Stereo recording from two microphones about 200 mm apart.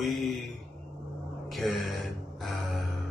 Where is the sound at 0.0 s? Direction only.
Centre (ahead or behind).